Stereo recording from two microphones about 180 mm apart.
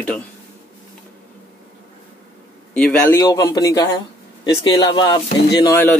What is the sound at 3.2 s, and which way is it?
Speech, 20° left (ahead or behind).